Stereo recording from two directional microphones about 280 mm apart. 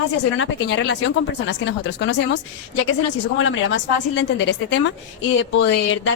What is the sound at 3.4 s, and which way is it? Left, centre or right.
A woman's voice, left.